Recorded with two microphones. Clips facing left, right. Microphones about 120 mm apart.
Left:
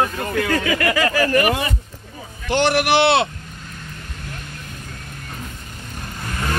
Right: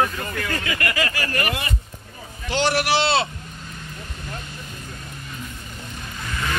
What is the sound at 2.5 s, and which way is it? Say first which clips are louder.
Speech: left 4 dB; 55° left (ahead or behind).